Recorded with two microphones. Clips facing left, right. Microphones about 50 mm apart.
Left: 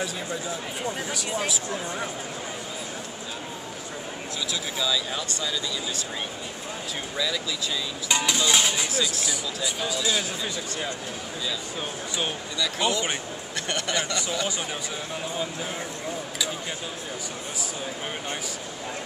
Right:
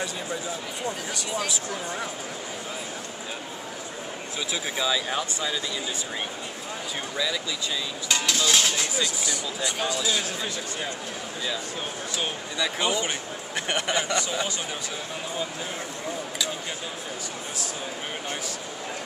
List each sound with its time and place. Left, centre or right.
0.8 s speech: centre
4.5 s speech: right
8.1 s speech: centre
12.5 s speech: right